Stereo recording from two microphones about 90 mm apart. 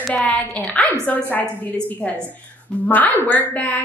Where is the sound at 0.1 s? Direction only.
15° left (ahead or behind).